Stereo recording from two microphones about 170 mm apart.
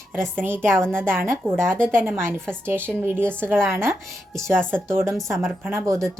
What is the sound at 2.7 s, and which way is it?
Speech, 10° left (ahead or behind).